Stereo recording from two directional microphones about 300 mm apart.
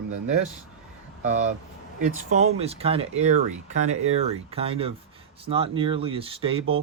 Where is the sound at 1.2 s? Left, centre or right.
Right.